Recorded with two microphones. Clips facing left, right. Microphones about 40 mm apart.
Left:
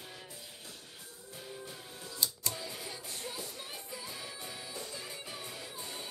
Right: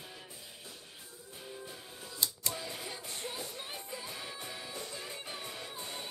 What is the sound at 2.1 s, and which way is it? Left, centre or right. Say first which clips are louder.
Music: even; right.